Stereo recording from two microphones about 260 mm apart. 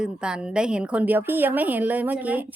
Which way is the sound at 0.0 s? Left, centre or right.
Centre.